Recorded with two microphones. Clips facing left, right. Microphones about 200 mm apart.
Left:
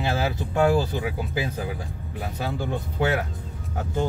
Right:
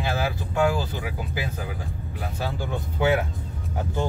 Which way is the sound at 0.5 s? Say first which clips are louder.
Left 3 dB; 45° left (ahead or behind).